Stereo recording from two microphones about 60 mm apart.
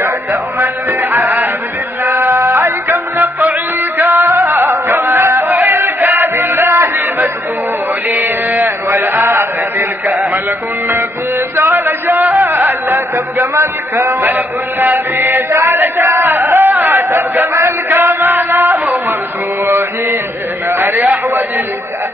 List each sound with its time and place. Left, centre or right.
0.0 s music: right
1.1 s music: right
4.0 s music: right
4.3 s music: right
8.1 s a sound: right
10.9 s music: right
12.4 s speech: right
15.7 s a sound: right
19.6 s mantra: right
20.6 s a sound: right